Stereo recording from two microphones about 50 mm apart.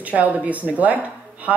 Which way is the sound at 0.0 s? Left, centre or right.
Right.